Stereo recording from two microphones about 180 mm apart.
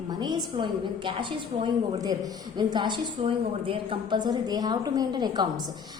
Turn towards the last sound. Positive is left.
turn(degrees=-25)  # may be behind; listen again after turning